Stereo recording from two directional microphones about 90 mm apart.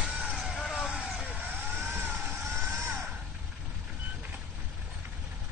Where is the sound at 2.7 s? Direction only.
30° right (ahead or behind).